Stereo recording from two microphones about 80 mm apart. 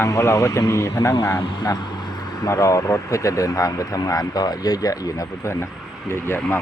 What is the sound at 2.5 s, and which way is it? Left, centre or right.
Speech, left.